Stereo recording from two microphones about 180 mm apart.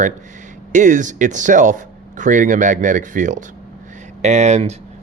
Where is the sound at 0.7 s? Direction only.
45° right (ahead or behind).